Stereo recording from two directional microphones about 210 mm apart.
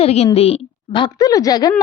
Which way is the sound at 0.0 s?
30° left (ahead or behind).